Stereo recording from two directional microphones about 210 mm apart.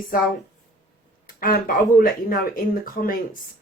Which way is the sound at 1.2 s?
40° left (ahead or behind).